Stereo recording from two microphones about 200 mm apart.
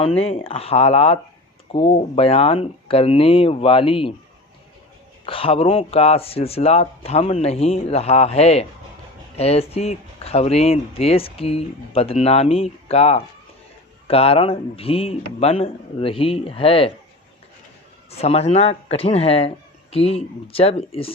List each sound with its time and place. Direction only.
0.0 s speech: 30° left (ahead or behind)
5.2 s speech: 25° left (ahead or behind)
18.2 s speech: 30° left (ahead or behind)